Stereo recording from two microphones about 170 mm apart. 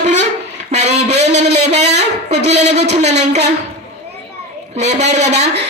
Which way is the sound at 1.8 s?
80° right.